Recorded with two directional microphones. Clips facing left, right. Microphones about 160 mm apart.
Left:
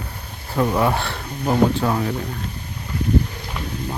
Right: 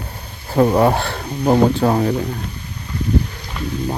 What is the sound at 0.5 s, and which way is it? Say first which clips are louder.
Speech: right 5 dB; 40° right (ahead or behind).